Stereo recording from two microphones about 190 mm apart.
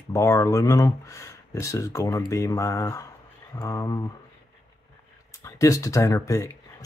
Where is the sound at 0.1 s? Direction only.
15° left (ahead or behind).